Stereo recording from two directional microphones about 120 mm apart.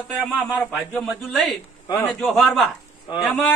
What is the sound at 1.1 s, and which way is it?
A woman's voice, centre (ahead or behind).